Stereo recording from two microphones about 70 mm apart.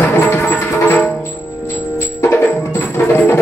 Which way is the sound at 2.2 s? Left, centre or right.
Left.